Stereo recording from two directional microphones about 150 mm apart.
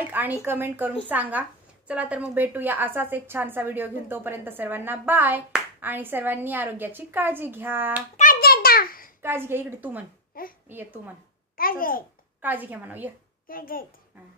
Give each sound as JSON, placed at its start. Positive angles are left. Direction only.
{"t": 0.0, "sound": "a woman's voice", "side_deg": -10}
{"t": 8.2, "sound": "a sound", "side_deg": 80}
{"t": 9.2, "sound": "a woman's voice", "side_deg": -15}
{"t": 10.3, "sound": "a child's voice", "side_deg": 75}
{"t": 10.7, "sound": "a woman's voice", "side_deg": -15}
{"t": 11.5, "sound": "a child's voice", "side_deg": 70}
{"t": 12.4, "sound": "a woman's voice", "side_deg": -10}
{"t": 13.5, "sound": "a child's voice", "side_deg": 70}